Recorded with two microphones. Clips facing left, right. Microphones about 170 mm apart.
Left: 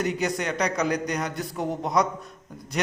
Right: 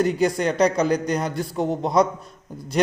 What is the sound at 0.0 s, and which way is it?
A man's voice, 30° right (ahead or behind).